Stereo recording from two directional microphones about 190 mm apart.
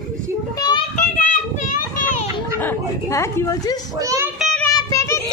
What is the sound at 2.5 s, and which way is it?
A woman's voice, 15° left (ahead or behind).